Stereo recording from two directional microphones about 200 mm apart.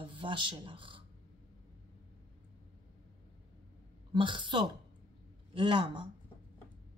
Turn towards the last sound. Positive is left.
turn(degrees=-25)  # may be behind; listen again after turning